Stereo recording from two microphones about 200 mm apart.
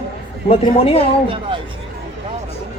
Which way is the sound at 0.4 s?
30° left (ahead or behind).